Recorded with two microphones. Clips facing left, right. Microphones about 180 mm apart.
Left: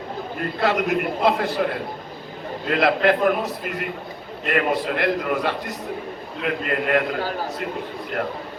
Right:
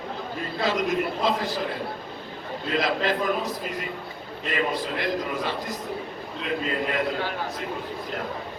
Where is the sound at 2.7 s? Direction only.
60° left (ahead or behind).